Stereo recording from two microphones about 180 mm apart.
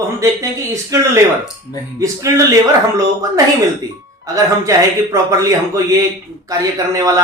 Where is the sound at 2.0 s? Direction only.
15° right (ahead or behind).